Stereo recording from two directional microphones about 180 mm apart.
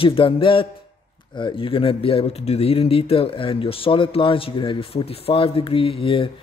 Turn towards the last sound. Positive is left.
turn(degrees=30)  # may be behind; listen again after turning